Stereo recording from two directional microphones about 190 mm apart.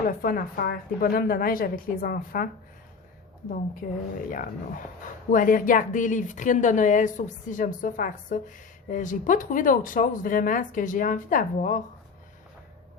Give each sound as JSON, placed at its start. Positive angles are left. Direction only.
{"t": 0.1, "sound": "a woman's voice", "side_deg": 50}
{"t": 3.8, "sound": "speech", "side_deg": 60}
{"t": 5.3, "sound": "a woman's voice", "side_deg": 45}